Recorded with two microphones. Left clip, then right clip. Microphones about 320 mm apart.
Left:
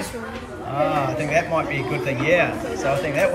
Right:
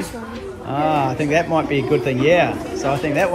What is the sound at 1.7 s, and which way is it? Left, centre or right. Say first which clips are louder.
Speech: right 6 dB; right.